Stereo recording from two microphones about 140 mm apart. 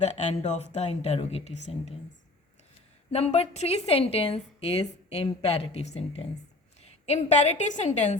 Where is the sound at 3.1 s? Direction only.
50° left (ahead or behind).